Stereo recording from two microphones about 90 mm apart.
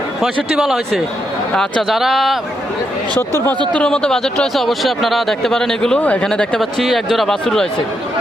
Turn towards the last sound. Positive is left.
turn(degrees=5)  # may be behind; listen again after turning